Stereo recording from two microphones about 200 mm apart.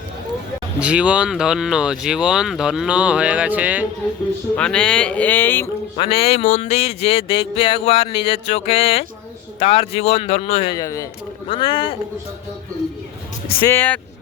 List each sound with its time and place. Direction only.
0.8 s speech: 5° right (ahead or behind)
4.5 s speech: 5° left (ahead or behind)
6.0 s a man's voice: 30° left (ahead or behind)
10.8 s speech: 15° left (ahead or behind)
13.7 s speech: 10° left (ahead or behind)